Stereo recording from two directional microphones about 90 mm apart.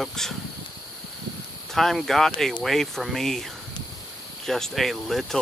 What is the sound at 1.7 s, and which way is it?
Speech, centre (ahead or behind).